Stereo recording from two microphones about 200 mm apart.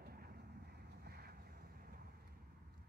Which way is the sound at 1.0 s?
50° right (ahead or behind).